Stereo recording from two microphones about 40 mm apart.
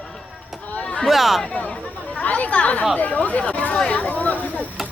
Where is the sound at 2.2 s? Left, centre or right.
Left.